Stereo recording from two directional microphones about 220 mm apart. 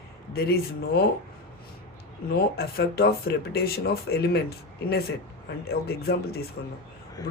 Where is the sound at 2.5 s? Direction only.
45° left (ahead or behind).